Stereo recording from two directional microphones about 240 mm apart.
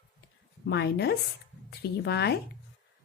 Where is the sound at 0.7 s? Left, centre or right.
Left.